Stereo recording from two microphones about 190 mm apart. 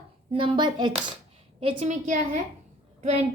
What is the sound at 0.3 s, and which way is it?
Speech, 25° right (ahead or behind).